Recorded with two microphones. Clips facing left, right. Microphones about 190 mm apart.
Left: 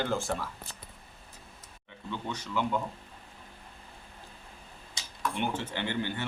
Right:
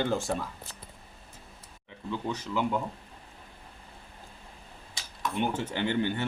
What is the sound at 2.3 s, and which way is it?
Speech, 10° right (ahead or behind).